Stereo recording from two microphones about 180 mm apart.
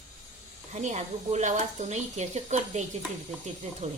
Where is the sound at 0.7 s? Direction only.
40° right (ahead or behind).